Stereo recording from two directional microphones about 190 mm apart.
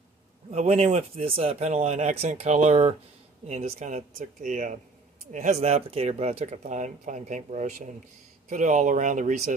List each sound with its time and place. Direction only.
0.5 s speech: 35° right (ahead or behind)